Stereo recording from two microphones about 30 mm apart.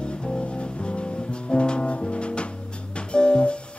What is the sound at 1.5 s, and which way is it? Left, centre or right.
Music, left.